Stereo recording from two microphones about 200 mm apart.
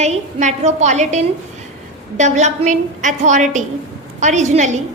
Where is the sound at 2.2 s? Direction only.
35° right (ahead or behind).